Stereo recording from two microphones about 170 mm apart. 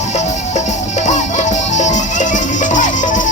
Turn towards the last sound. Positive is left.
turn(degrees=50)  # may be behind; listen again after turning